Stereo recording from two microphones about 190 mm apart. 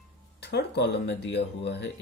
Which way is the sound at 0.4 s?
60° left (ahead or behind).